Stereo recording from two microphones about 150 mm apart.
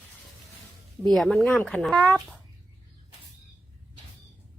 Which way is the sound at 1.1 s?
5° left (ahead or behind).